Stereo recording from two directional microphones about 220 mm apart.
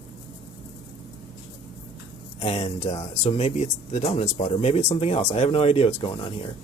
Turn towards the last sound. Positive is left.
turn(degrees=25)  # may be behind; listen again after turning